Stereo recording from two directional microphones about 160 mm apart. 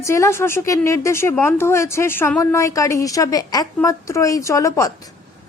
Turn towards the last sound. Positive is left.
turn(degrees=20)  # may be behind; listen again after turning